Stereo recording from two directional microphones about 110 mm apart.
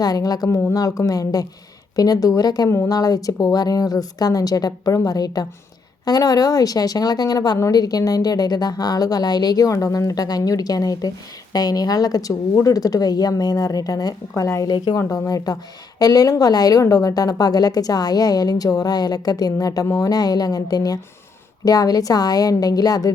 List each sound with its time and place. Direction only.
0.0 s a woman's voice: 35° left (ahead or behind)
2.6 s speech: 25° left (ahead or behind)
2.9 s a woman's voice: 35° left (ahead or behind)